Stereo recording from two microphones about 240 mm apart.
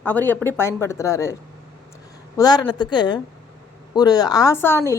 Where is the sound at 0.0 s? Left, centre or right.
Centre.